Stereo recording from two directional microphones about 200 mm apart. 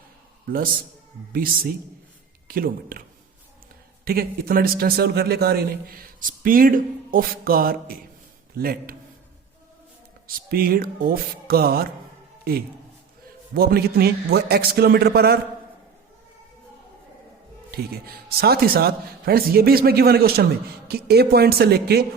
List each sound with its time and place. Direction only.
1.3 s a man's voice: 45° right (ahead or behind)
4.0 s a man's voice: 50° right (ahead or behind)
10.2 s a man's voice: 45° right (ahead or behind)
17.7 s a man's voice: 50° right (ahead or behind)